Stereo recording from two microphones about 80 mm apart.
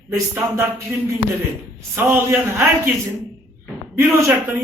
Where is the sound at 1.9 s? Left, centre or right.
Right.